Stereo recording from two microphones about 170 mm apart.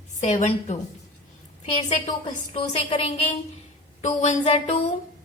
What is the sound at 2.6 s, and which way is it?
A woman's voice, 40° left (ahead or behind).